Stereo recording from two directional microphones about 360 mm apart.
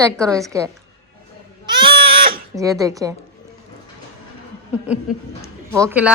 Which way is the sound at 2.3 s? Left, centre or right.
Centre.